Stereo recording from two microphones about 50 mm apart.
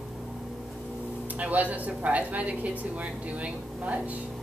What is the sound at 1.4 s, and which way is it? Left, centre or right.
Speech, right.